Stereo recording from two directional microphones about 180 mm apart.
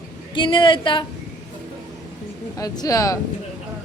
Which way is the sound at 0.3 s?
30° left (ahead or behind).